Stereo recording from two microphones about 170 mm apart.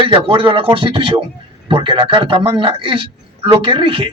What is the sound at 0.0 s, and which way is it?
A man's voice, 30° right (ahead or behind).